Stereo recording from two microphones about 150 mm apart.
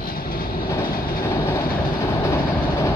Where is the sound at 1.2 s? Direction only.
20° left (ahead or behind).